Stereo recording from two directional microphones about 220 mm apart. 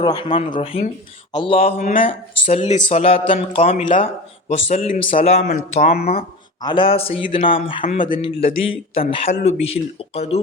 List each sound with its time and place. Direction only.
0.0 s a man's voice: 20° left (ahead or behind)
3.3 s speech: 35° left (ahead or behind)
6.6 s a man's voice: 20° left (ahead or behind)